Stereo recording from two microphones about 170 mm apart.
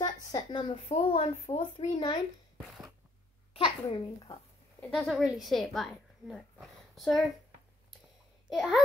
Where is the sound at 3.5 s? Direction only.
30° left (ahead or behind).